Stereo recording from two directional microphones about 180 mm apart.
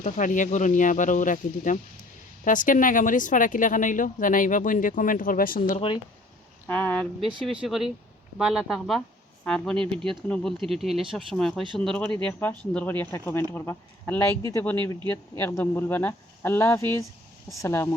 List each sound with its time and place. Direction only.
0.0 s speech: 45° left (ahead or behind)
6.7 s speech: 10° left (ahead or behind)